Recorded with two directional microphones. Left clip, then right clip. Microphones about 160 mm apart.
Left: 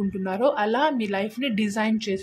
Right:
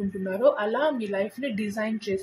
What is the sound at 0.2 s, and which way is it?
A woman's voice, 35° left (ahead or behind).